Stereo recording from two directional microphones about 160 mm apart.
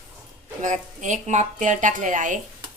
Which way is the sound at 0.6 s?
50° right (ahead or behind).